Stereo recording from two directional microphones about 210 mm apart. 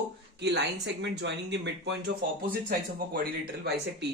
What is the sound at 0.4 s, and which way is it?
Speech, 50° right (ahead or behind).